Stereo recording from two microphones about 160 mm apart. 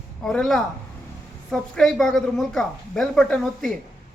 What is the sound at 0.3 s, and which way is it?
A woman's voice, 5° left (ahead or behind).